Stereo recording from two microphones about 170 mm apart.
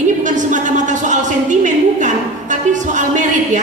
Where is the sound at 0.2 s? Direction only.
45° right (ahead or behind).